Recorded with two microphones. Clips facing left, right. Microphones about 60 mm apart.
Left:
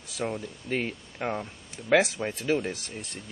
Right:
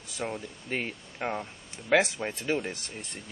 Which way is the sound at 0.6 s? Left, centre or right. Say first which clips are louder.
Left 3 dB; centre.